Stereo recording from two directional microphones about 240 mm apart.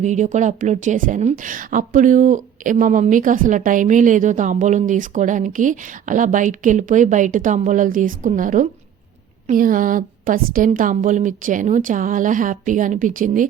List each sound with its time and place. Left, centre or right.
0.0 s a woman's voice: right